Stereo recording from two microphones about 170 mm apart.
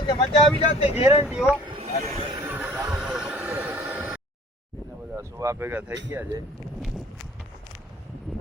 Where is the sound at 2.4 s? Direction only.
10° right (ahead or behind).